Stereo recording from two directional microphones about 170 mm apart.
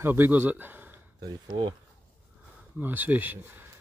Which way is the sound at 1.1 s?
25° right (ahead or behind).